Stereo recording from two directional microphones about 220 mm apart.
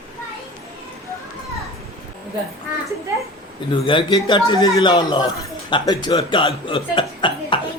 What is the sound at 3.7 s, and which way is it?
Speech, 20° left (ahead or behind).